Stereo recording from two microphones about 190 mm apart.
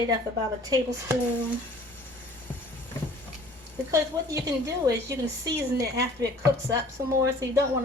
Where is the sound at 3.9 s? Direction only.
15° right (ahead or behind).